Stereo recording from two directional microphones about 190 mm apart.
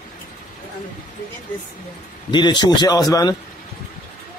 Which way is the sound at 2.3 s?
25° left (ahead or behind).